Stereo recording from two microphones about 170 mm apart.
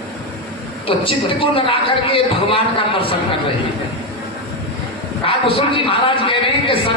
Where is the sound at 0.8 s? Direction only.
30° left (ahead or behind).